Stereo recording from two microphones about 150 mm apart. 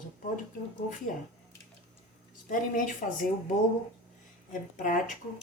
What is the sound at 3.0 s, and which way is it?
Speech, 55° left (ahead or behind).